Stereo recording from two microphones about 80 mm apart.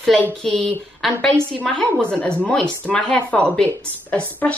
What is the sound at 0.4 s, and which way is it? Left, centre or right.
Speech, centre.